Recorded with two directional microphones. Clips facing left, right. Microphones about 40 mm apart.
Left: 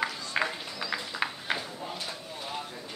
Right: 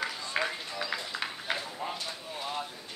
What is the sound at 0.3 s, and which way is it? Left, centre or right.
Run, centre.